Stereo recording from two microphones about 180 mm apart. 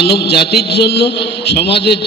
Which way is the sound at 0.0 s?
65° left (ahead or behind).